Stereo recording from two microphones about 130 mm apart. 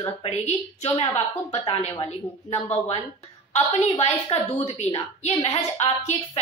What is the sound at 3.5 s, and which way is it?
Speech, 55° left (ahead or behind).